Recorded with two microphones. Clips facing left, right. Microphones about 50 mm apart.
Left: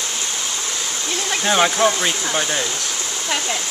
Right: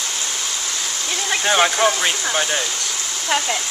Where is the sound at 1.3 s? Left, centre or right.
Centre.